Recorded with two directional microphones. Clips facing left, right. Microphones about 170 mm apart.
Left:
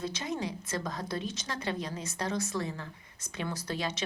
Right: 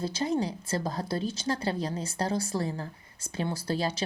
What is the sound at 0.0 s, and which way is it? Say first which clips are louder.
A woman's voice: right 6 dB; 30° right (ahead or behind).